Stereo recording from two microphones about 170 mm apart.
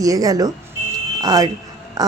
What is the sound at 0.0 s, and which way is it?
A woman's voice, 20° right (ahead or behind).